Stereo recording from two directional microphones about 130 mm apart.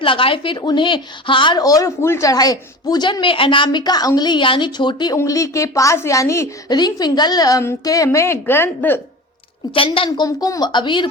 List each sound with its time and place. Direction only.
0.0 s a woman's voice: 40° left (ahead or behind)
5.1 s a woman's voice: 25° left (ahead or behind)
6.7 s a woman's voice: 30° left (ahead or behind); by 9.0 s 15° left (ahead or behind)
9.7 s a woman's voice: 45° left (ahead or behind)
10.1 s a woman's voice: 30° left (ahead or behind)